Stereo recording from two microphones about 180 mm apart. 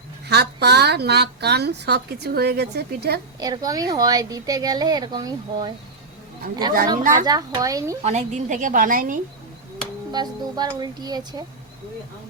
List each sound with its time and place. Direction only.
0.3 s a woman's voice: 65° right (ahead or behind)
3.4 s speech: 20° right (ahead or behind)
6.4 s a woman's voice: 50° right (ahead or behind)
7.3 s speech: 20° right (ahead or behind)
8.0 s a woman's voice: 40° right (ahead or behind)
10.1 s speech: 25° right (ahead or behind)